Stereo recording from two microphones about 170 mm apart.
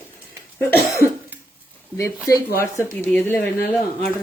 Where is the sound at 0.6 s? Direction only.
15° left (ahead or behind).